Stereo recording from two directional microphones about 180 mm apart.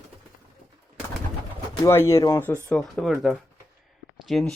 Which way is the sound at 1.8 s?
15° left (ahead or behind).